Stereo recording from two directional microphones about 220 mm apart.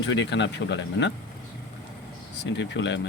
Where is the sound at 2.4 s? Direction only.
55° left (ahead or behind).